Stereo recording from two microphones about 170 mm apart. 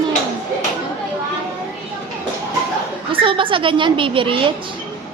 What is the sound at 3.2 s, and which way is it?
A woman's voice, 30° right (ahead or behind).